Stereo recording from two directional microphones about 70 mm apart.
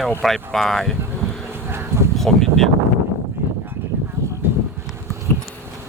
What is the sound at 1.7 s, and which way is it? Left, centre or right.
Bee, right.